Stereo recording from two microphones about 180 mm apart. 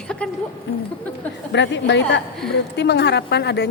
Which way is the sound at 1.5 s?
75° left (ahead or behind).